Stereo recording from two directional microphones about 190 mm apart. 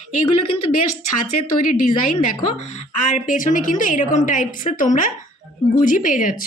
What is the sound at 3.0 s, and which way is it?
A woman's voice, 45° left (ahead or behind).